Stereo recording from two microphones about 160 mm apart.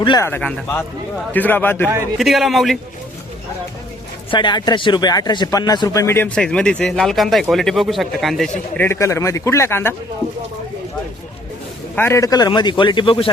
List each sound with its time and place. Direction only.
0.2 s a man's voice: 10° left (ahead or behind)
2.1 s speech: centre (ahead or behind)
4.3 s a man's voice: 30° left (ahead or behind); by 8.8 s centre (ahead or behind)
8.8 s a man's voice: 15° left (ahead or behind)
11.9 s a man's voice: 15° left (ahead or behind); by 13.3 s 35° left (ahead or behind)